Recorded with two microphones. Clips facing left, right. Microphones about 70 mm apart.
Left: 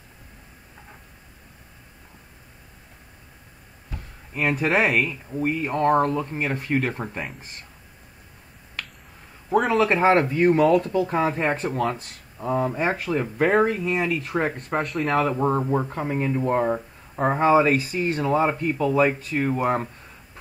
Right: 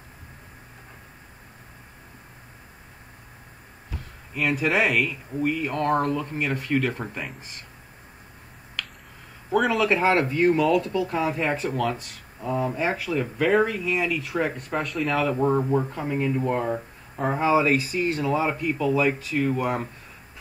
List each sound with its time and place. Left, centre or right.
4.3 s speech: left
9.5 s speech: left
14.8 s speech: left
15.3 s speech: centre
15.9 s speech: left